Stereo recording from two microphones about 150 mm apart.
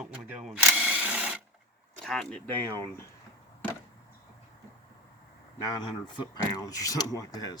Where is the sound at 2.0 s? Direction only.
5° left (ahead or behind).